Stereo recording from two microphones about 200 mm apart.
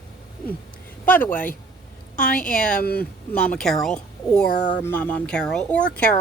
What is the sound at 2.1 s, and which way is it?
Speech, 45° left (ahead or behind).